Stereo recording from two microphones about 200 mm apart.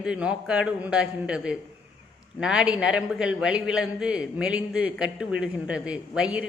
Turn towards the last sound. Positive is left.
turn(degrees=-5)  # may be behind; listen again after turning